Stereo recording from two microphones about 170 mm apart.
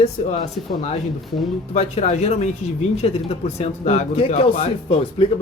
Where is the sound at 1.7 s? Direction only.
40° left (ahead or behind).